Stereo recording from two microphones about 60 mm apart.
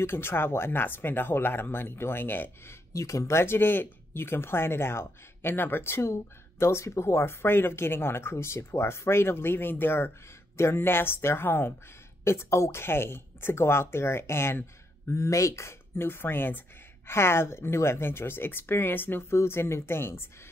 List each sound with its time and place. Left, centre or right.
0.0 s speech: left
2.9 s speech: left
15.0 s speech: left
17.1 s speech: left